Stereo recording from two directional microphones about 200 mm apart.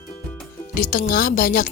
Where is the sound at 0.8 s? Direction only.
40° left (ahead or behind).